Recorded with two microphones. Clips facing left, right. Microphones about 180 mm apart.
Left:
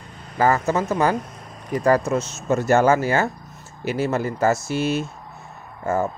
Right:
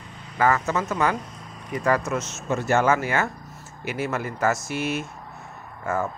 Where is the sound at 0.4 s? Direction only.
30° left (ahead or behind).